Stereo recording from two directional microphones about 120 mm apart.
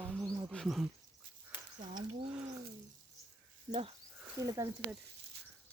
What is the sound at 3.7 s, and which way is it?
Speech, 55° right (ahead or behind).